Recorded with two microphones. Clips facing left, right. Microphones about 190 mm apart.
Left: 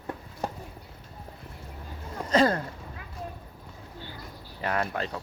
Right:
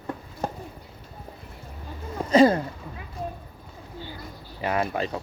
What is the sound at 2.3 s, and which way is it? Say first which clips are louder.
Speech: right 6 dB; 10° right (ahead or behind).